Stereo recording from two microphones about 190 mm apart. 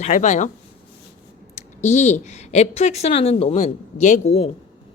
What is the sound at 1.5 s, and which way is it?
Speech, 35° left (ahead or behind).